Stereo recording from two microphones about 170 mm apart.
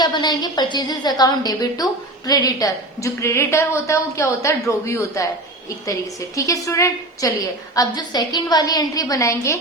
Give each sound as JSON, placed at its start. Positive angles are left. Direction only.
{"t": 0.0, "sound": "a woman's voice", "side_deg": 25}